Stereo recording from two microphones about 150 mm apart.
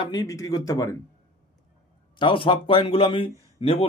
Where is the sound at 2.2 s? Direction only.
35° left (ahead or behind).